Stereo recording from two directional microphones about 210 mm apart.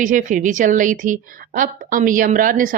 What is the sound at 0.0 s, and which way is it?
A woman's voice, 40° right (ahead or behind).